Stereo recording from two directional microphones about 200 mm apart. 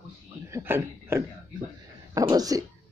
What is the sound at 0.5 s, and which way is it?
Speech, 10° right (ahead or behind).